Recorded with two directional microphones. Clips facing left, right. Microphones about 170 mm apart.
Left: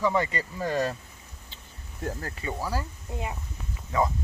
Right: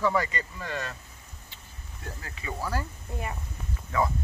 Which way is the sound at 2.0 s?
45° left (ahead or behind).